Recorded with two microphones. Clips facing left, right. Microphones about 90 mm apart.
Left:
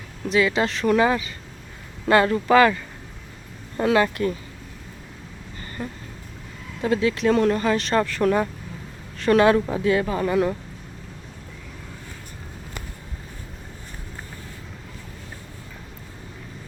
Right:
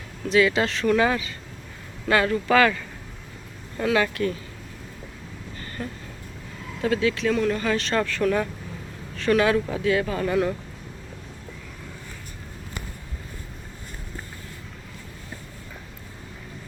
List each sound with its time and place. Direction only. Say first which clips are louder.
0.2 s vehicle: right 1 dB; 15° left (ahead or behind)
0.6 s speech: left 2 dB; 20° left (ahead or behind)
2.0 s speech: left 3 dB; 35° left (ahead or behind)
3.8 s speech: left 3 dB; 30° left (ahead or behind)
5.8 s vehicle: left 1 dB; 10° left (ahead or behind)
6.8 s speech: left 2 dB; 25° left (ahead or behind)